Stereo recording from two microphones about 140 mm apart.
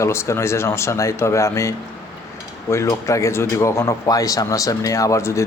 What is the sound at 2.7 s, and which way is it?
Speech, 20° left (ahead or behind).